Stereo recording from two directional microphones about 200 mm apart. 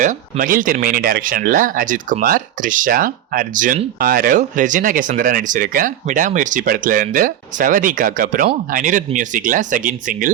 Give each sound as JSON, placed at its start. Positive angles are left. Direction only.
{"t": 0.0, "sound": "speech", "side_deg": -40}